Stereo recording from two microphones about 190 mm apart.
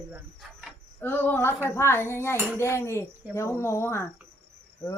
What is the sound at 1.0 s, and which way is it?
Speech, 10° left (ahead or behind).